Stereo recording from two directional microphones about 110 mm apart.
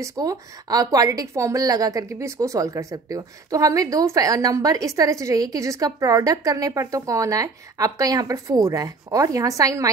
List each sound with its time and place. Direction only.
0.0 s a woman's voice: 35° right (ahead or behind)